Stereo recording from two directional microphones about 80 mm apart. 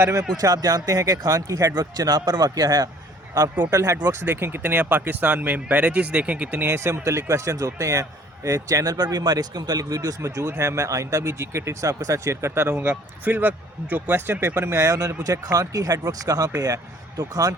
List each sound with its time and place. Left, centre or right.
0.0 s speech: right
0.4 s speech: right
1.7 s a man's voice: right
3.7 s speech: right
4.3 s speech: right
12.7 s speech: centre; by 17.5 s right